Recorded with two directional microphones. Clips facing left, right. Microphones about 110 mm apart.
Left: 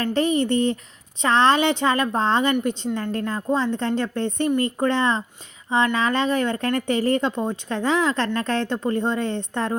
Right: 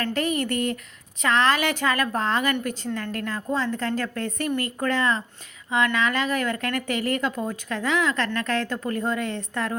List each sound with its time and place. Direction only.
0.0 s a woman's voice: 30° left (ahead or behind)